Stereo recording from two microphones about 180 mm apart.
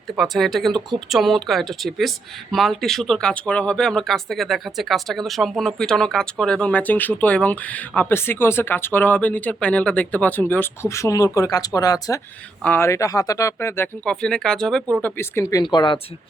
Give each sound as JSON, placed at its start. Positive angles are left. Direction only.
{"t": 0.2, "sound": "speech", "side_deg": 0}